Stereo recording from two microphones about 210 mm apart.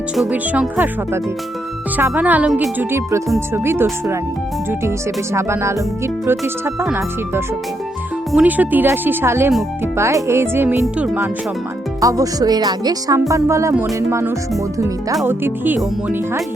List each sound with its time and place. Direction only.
0.2 s speech: 5° right (ahead or behind)